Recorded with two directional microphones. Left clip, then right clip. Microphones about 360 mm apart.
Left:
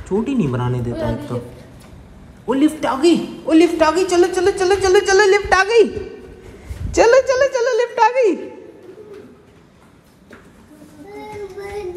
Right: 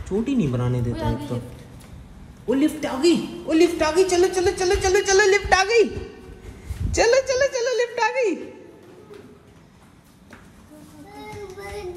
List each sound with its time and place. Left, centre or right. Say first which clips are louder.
0.2 s a man's voice: left 4 dB; right
2.5 s a man's voice: left 5 dB; right
6.9 s a sound: left 6 dB; right